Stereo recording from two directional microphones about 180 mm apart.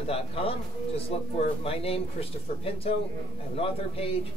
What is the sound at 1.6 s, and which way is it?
A man's voice, 30° left (ahead or behind).